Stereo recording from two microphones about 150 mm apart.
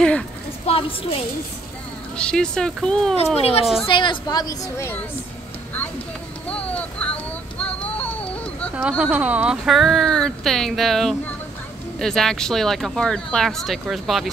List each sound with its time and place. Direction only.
0.7 s a woman's voice: 40° left (ahead or behind)
2.1 s speech: 5° left (ahead or behind)
3.2 s a woman's voice: 40° left (ahead or behind); by 4.9 s 20° left (ahead or behind)
6.5 s a sound: 10° left (ahead or behind)
8.8 s speech: 5° right (ahead or behind)